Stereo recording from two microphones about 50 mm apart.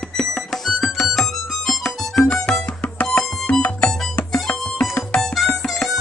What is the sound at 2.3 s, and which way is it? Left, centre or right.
Music, left.